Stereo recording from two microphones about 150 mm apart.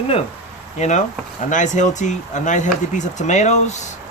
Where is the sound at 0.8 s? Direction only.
55° left (ahead or behind).